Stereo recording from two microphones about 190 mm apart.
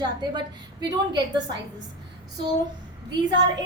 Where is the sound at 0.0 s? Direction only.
20° right (ahead or behind).